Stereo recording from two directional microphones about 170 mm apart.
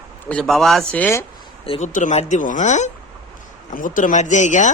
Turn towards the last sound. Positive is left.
turn(degrees=45)  # may be behind; listen again after turning